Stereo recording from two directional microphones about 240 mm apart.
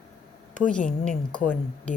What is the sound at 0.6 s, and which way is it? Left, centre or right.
A woman's voice, centre.